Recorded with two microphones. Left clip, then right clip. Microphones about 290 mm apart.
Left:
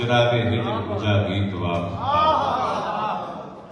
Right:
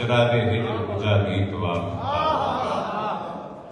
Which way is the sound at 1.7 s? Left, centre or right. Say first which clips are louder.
Left 5 dB; left.